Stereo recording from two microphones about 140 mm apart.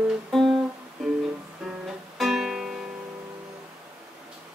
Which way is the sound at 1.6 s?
Centre (ahead or behind).